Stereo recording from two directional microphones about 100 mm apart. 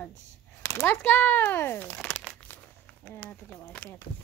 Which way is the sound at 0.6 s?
25° left (ahead or behind).